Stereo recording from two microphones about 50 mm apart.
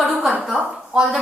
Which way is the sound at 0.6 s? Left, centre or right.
Right.